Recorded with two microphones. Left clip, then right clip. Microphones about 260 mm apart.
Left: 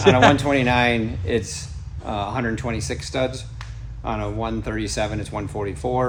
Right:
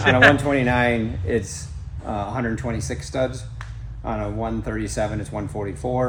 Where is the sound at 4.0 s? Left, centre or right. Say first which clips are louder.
Left 1 dB; centre.